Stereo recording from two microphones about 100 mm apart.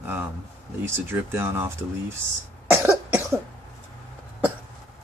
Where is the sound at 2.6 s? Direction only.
15° right (ahead or behind).